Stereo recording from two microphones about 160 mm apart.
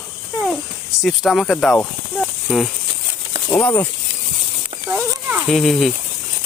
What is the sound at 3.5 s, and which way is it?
Speech, 10° left (ahead or behind).